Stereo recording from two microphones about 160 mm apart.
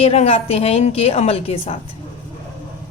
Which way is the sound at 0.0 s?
40° left (ahead or behind).